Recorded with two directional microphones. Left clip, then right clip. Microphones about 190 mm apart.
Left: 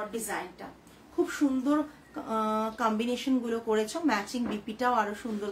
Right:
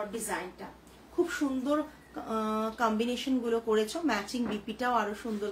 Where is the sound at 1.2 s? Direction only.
15° left (ahead or behind).